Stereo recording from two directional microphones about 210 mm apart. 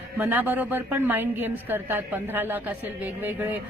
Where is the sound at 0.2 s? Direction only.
5° right (ahead or behind).